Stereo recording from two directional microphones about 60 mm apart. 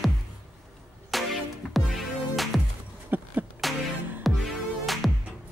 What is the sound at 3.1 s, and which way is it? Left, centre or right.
Beatboxing, right.